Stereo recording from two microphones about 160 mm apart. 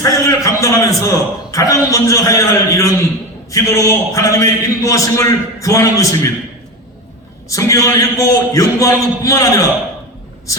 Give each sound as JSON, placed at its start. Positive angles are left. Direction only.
{"t": 0.0, "sound": "a man's voice", "side_deg": 20}
{"t": 7.5, "sound": "a man's voice", "side_deg": 20}